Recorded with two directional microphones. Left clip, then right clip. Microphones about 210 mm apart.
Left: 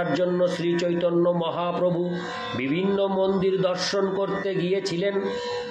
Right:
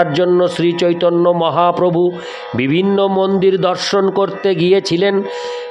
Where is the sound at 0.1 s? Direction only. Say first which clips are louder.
Right 9 dB; 50° right (ahead or behind).